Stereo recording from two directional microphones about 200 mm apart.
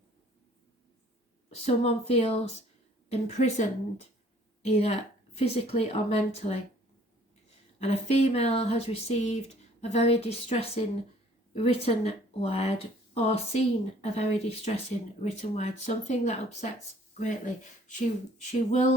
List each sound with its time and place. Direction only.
1.5 s speech: 30° left (ahead or behind)
7.8 s speech: 30° left (ahead or behind)